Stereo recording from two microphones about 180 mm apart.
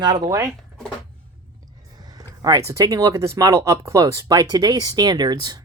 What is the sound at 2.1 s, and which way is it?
Speech, 20° right (ahead or behind).